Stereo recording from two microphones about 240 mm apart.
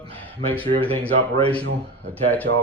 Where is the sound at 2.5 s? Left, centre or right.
Right.